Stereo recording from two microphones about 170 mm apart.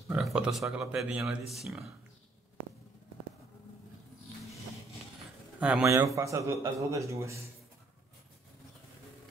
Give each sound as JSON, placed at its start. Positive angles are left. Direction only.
{"t": 0.1, "sound": "speech", "side_deg": -5}
{"t": 5.6, "sound": "a man's voice", "side_deg": -5}
{"t": 5.9, "sound": "a man's voice", "side_deg": -20}